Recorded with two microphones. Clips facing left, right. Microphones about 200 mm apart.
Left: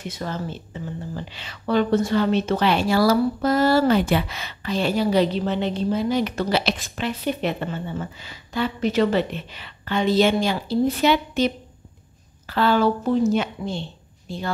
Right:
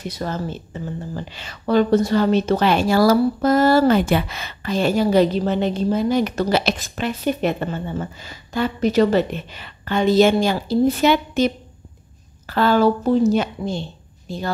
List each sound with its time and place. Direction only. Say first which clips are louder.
0.0 s a woman's voice: right 3 dB; 40° right (ahead or behind)